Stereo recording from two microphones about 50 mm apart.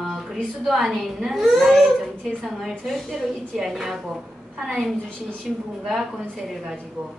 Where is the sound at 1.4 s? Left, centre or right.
Centre.